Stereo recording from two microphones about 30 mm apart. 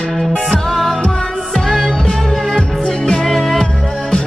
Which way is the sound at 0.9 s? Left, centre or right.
Centre.